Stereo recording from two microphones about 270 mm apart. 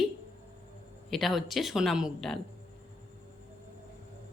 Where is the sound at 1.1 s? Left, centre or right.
Centre.